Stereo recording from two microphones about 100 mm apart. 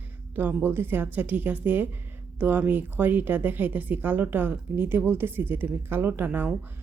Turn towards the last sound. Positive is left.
turn(degrees=-20)  # may be behind; listen again after turning